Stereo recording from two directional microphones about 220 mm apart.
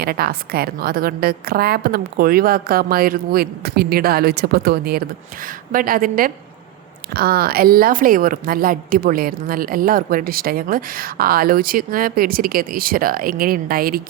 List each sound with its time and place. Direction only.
0.0 s a woman's voice: 45° right (ahead or behind)